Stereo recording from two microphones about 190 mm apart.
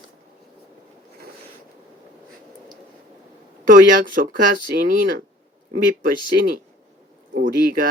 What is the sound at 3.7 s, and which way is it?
Speech, 45° right (ahead or behind).